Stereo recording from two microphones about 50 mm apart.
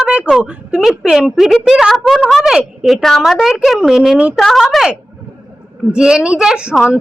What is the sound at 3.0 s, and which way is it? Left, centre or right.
Speech, centre.